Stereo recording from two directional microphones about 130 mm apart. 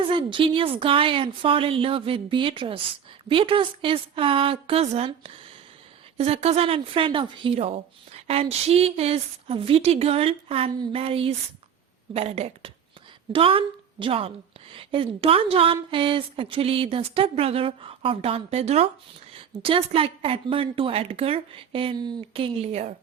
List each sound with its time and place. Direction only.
0.0 s a woman's voice: 40° right (ahead or behind); by 23.0 s 55° right (ahead or behind)